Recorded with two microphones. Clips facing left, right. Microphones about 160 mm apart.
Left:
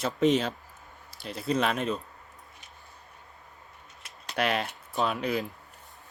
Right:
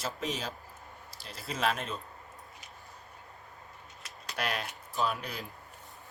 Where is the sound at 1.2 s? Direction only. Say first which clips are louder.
Left 5 dB; centre (ahead or behind).